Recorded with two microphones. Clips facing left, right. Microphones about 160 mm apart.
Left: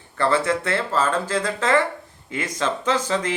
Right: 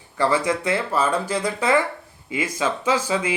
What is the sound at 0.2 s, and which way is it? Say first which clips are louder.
Mantra: even; 15° right (ahead or behind).